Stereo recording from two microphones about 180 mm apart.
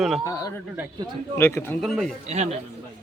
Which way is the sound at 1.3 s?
15° left (ahead or behind).